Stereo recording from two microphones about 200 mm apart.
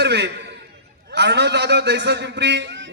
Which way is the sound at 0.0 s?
60° right (ahead or behind).